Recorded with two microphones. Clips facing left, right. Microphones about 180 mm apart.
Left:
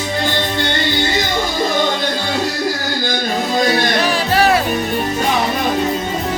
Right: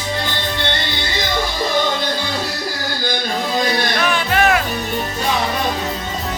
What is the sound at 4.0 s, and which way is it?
Music, 35° left (ahead or behind).